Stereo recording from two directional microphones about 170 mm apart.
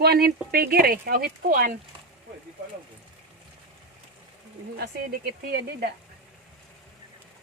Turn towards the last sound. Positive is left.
turn(degrees=-65)  # may be behind; listen again after turning